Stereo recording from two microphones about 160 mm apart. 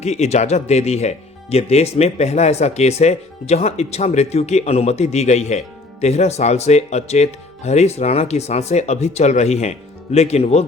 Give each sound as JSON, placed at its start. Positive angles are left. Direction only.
{"t": 0.0, "sound": "speech", "side_deg": 45}